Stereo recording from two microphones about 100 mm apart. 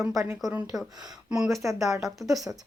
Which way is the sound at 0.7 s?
Centre (ahead or behind).